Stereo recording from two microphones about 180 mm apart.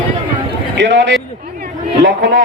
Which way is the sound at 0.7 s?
90° right.